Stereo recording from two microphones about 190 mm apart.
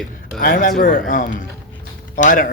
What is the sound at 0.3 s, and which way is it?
Speech, 45° left (ahead or behind).